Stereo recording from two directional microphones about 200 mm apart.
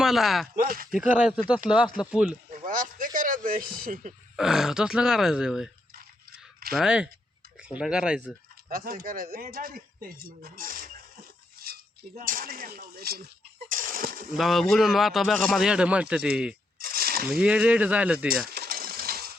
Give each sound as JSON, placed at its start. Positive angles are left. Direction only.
{"t": 0.0, "sound": "speech", "side_deg": 0}
{"t": 0.5, "sound": "speech", "side_deg": -45}
{"t": 0.9, "sound": "speech", "side_deg": -5}
{"t": 2.5, "sound": "a sound", "side_deg": -40}
{"t": 4.4, "sound": "speech", "side_deg": 0}
{"t": 6.7, "sound": "speech", "side_deg": -5}
{"t": 8.7, "sound": "speech", "side_deg": -45}
{"t": 13.7, "sound": "a sound", "side_deg": -45}
{"t": 14.3, "sound": "speech", "side_deg": 0}
{"t": 16.8, "sound": "a sound", "side_deg": -50}
{"t": 17.2, "sound": "speech", "side_deg": -5}
{"t": 18.5, "sound": "pigeon", "side_deg": -50}